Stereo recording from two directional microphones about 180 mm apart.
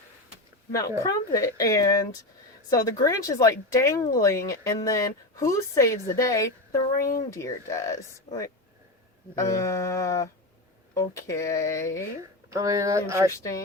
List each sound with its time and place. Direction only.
1.0 s speech: 20° left (ahead or behind)
12.5 s speech: 15° right (ahead or behind)